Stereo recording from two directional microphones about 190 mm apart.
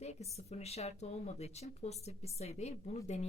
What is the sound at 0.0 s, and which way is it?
Speech, 35° left (ahead or behind).